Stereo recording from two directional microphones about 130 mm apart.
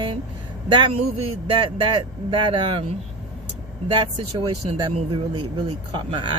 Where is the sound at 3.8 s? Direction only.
40° right (ahead or behind).